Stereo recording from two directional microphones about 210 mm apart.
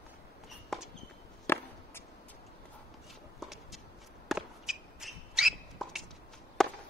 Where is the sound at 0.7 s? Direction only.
Centre (ahead or behind).